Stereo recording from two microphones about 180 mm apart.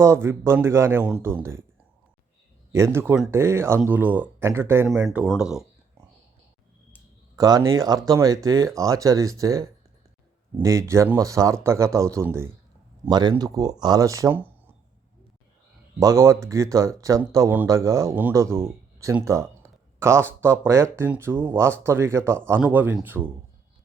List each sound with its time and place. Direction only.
0.0 s speech: 15° right (ahead or behind)
2.7 s speech: 15° right (ahead or behind)
7.3 s speech: 20° right (ahead or behind)
16.0 s speech: 15° right (ahead or behind)